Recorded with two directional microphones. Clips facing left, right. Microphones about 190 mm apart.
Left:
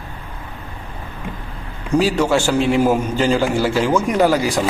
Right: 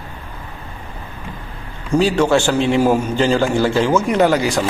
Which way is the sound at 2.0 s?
10° left (ahead or behind).